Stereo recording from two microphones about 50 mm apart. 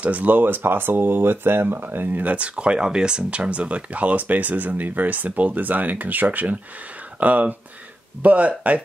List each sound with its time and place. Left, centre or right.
0.0 s speech: right
2.3 s speech: right